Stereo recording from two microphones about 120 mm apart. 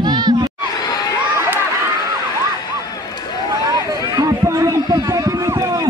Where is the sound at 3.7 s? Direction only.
30° right (ahead or behind).